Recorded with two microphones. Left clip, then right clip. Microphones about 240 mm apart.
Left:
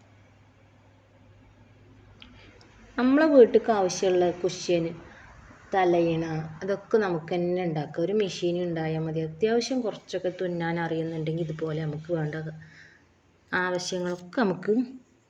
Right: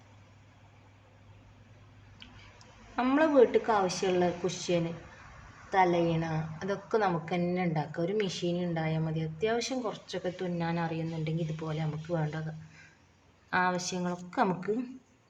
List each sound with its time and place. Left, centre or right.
2.1 s a sound: centre
4.0 s a woman's voice: centre
13.5 s a woman's voice: centre